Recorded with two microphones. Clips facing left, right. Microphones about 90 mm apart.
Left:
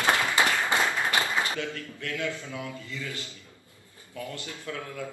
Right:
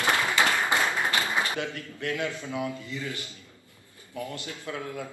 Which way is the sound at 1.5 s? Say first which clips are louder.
Right 1 dB; 20° right (ahead or behind).